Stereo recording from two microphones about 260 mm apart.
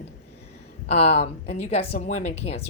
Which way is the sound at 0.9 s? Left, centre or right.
Left.